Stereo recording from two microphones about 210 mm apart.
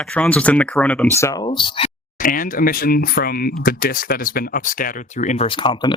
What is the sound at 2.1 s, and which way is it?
Speech, 40° left (ahead or behind).